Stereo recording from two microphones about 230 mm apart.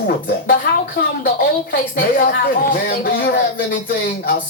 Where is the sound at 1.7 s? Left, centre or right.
Left.